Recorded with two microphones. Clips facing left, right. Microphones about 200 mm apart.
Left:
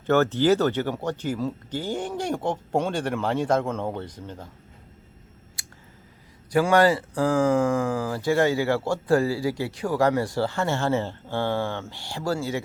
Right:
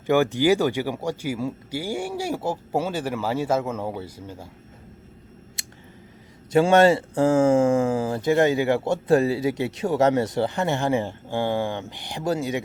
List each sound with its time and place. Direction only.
0.1 s speech: 10° right (ahead or behind)
5.6 s a sound: 25° right (ahead or behind)
6.5 s speech: 25° right (ahead or behind)